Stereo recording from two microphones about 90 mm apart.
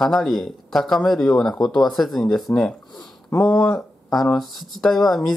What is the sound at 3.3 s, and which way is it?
Speech, 25° left (ahead or behind).